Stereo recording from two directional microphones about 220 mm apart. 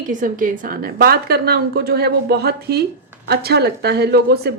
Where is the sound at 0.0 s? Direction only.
35° right (ahead or behind).